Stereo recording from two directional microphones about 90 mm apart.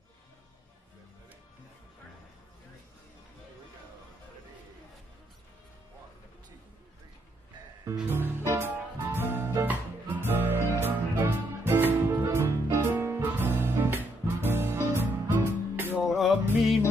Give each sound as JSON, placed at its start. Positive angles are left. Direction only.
{"t": 8.1, "sound": "music", "side_deg": -25}
{"t": 16.0, "sound": "music", "side_deg": 0}